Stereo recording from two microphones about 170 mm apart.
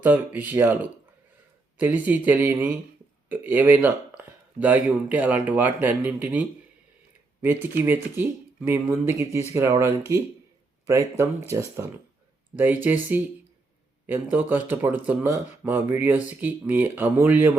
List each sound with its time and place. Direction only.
0.0 s speech: 10° right (ahead or behind)